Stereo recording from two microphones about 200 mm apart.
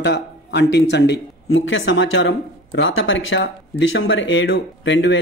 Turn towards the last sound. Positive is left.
turn(degrees=65)  # may be behind; listen again after turning